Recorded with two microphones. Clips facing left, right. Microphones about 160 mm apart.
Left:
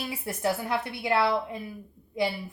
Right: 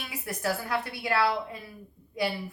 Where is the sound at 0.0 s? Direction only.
25° left (ahead or behind).